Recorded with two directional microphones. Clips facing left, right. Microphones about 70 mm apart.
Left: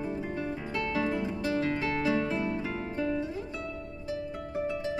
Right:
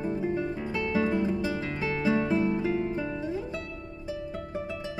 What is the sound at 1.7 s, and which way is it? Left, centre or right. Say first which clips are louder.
Music: left 1 dB; centre.